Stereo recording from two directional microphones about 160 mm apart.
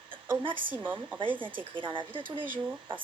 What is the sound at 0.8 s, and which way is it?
Speech, 10° right (ahead or behind).